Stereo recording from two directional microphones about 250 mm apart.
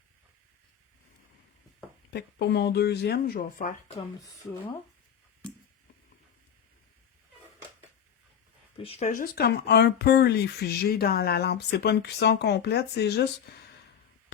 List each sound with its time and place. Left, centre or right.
2.0 s speech: left
8.8 s speech: left